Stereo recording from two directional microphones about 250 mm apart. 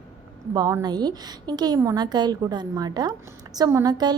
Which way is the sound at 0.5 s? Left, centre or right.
Centre.